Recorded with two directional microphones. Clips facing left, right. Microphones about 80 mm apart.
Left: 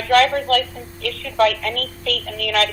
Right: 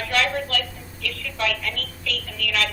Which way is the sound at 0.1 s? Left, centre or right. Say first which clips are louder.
Left 10 dB; left.